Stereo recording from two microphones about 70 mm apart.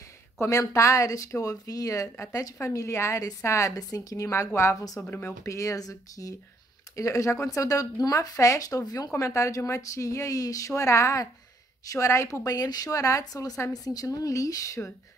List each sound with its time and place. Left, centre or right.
0.4 s speech: left
7.0 s speech: left
9.1 s speech: left
12.9 s speech: left
13.2 s speech: left